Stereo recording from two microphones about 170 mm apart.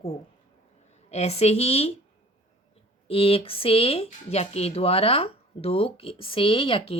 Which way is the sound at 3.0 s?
35° left (ahead or behind).